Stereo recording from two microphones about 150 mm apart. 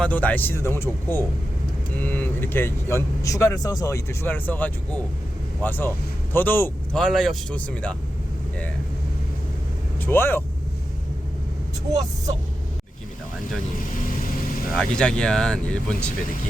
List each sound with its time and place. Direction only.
0.0 s speech: 10° left (ahead or behind)
10.0 s speech: 15° left (ahead or behind)
14.7 s speech: 5° left (ahead or behind)